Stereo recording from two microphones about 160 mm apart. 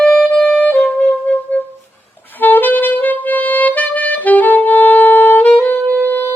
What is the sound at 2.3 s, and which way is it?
Music, 10° left (ahead or behind).